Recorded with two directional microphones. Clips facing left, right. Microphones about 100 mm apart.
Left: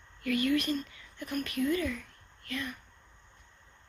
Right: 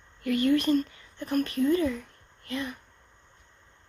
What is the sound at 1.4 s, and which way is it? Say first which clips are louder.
Speech: right 5 dB; 30° right (ahead or behind).